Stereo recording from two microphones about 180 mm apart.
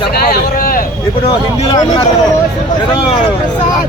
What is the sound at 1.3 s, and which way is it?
Speech, 25° left (ahead or behind).